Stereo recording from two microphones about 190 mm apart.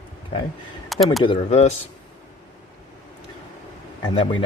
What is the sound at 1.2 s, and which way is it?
Speech, 30° left (ahead or behind).